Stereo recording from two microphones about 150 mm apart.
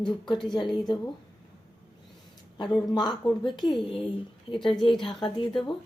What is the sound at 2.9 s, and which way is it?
Speech, 30° left (ahead or behind).